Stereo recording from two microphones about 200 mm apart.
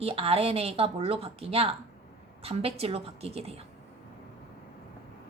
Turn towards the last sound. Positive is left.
turn(degrees=-30)  # may be behind; listen again after turning